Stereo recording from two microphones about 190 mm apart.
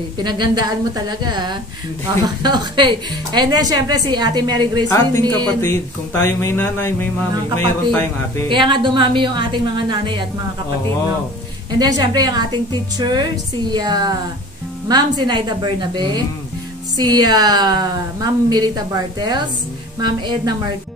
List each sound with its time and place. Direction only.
0.2 s a woman's voice: 25° right (ahead or behind)
5.5 s speech: 10° left (ahead or behind)
8.5 s a woman's voice: 25° right (ahead or behind)
11.8 s a woman's voice: 20° right (ahead or behind)